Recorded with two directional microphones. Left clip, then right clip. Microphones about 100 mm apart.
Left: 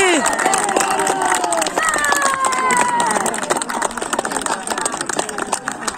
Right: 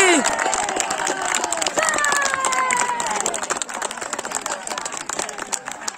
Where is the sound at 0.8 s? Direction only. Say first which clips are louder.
Left 6 dB; centre (ahead or behind).